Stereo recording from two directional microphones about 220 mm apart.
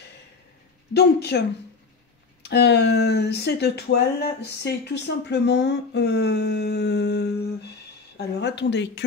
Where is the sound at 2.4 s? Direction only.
50° left (ahead or behind).